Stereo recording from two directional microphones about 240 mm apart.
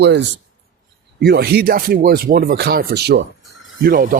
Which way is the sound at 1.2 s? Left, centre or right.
Right.